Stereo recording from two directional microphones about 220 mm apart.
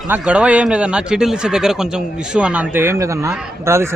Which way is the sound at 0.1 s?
5° right (ahead or behind).